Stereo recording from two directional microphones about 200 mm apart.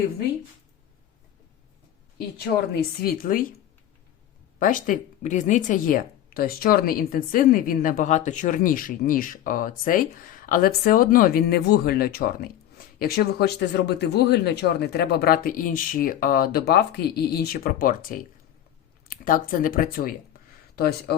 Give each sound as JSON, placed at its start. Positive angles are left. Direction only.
{"t": 3.0, "sound": "speech", "side_deg": 45}
{"t": 4.6, "sound": "speech", "side_deg": 40}